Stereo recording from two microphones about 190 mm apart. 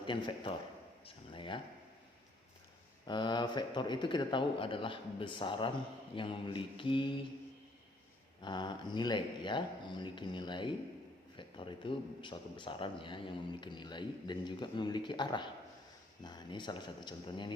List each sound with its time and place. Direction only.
0.0 s a man's voice: 25° left (ahead or behind)
1.0 s a sound: 25° left (ahead or behind)
3.1 s a man's voice: 25° left (ahead or behind)
8.4 s a man's voice: 25° left (ahead or behind)